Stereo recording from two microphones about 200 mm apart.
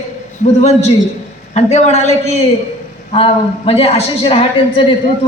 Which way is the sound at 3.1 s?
30° left (ahead or behind).